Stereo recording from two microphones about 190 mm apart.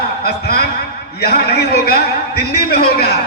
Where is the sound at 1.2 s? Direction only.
60° left (ahead or behind).